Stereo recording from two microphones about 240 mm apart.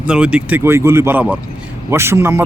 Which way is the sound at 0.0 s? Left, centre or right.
Centre.